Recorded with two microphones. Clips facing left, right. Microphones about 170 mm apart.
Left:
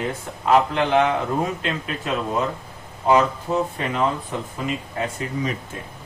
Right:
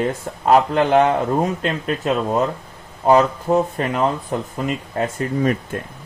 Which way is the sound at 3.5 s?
35° right (ahead or behind).